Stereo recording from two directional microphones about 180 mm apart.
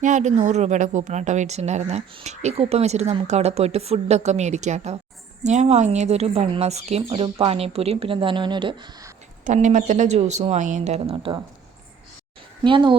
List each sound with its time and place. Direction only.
0.0 s speech: 40° right (ahead or behind); by 9.1 s 20° right (ahead or behind)
9.4 s speech: 40° right (ahead or behind)
12.6 s speech: 25° right (ahead or behind)